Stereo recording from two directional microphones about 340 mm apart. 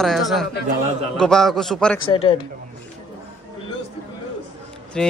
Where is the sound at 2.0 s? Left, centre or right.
Centre.